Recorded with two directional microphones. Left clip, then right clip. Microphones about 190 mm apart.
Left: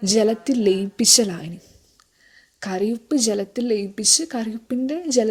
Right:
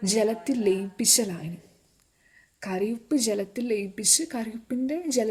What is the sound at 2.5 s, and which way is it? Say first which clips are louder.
A woman's voice: left 5 dB; 20° left (ahead or behind).